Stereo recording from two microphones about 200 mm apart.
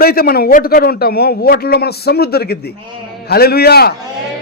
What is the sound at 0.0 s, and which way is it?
A man's voice, 50° left (ahead or behind).